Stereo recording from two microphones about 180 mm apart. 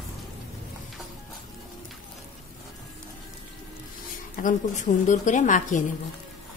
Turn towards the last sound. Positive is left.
turn(degrees=45)  # may be behind; listen again after turning